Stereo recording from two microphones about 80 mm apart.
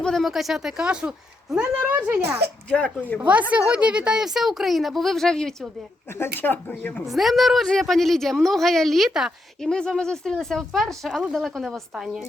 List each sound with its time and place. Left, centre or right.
0.0 s speech: centre
2.6 s speech: centre
3.2 s a woman's voice: centre
6.1 s speech: left
7.0 s speech: centre
9.6 s speech: centre